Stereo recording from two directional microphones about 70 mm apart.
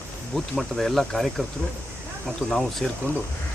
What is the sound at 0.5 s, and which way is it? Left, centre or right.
Speech, centre.